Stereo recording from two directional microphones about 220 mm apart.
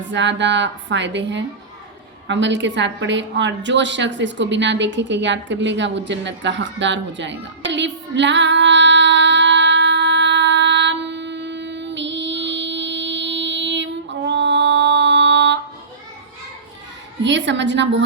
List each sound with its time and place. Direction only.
0.1 s a woman's voice: 55° right (ahead or behind)
2.2 s a sound: 55° right (ahead or behind)
17.2 s a woman's voice: 55° right (ahead or behind)